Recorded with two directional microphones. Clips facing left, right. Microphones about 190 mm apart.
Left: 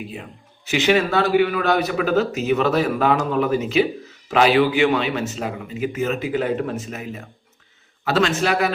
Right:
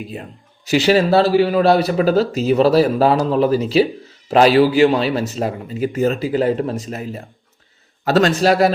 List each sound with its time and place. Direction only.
0.0 s a man's voice: 40° right (ahead or behind)